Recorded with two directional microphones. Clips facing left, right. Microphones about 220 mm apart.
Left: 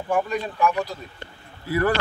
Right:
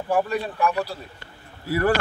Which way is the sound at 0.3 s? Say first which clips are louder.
Left 1 dB; 35° right (ahead or behind).